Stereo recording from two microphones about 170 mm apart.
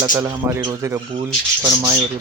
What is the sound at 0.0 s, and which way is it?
Speech, 20° right (ahead or behind).